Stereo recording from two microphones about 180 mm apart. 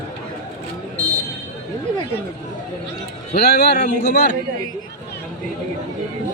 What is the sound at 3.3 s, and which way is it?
Speech, 65° left (ahead or behind).